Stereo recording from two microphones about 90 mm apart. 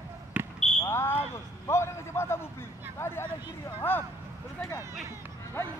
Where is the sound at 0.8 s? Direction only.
25° left (ahead or behind).